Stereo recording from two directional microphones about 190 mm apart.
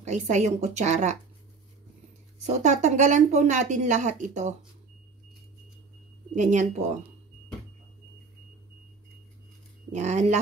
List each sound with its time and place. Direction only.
0.0 s a woman's voice: 40° right (ahead or behind)
2.4 s a woman's voice: 40° right (ahead or behind)
6.3 s a woman's voice: 40° right (ahead or behind)
9.9 s a woman's voice: 35° right (ahead or behind)